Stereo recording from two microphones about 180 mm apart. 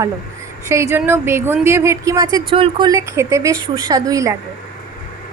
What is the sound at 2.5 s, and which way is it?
Speech, 30° right (ahead or behind).